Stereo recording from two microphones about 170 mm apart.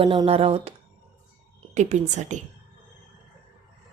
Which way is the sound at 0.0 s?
30° right (ahead or behind).